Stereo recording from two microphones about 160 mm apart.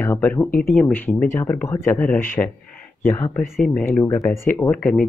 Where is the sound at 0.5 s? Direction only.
65° left (ahead or behind).